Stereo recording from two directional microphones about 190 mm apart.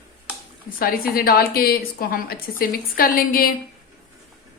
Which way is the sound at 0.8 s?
50° left (ahead or behind).